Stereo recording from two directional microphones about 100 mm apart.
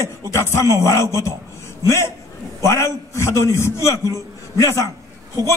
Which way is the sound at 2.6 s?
30° left (ahead or behind).